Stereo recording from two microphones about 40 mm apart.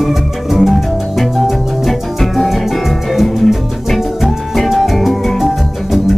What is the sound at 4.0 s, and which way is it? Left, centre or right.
Music, centre.